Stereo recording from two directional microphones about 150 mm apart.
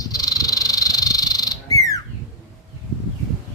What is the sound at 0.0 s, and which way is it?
Frog, 25° left (ahead or behind).